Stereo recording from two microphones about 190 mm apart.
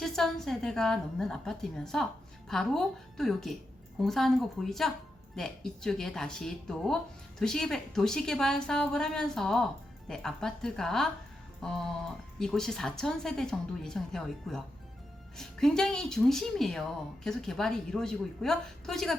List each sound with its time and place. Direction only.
0.0 s speech: centre (ahead or behind)